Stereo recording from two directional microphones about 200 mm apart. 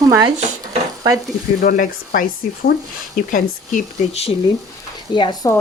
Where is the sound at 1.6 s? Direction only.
45° left (ahead or behind); by 5.5 s 20° left (ahead or behind).